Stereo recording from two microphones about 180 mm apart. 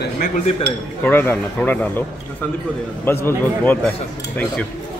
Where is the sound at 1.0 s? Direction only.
10° left (ahead or behind).